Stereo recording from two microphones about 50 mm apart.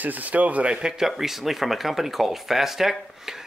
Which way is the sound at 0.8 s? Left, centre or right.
Centre.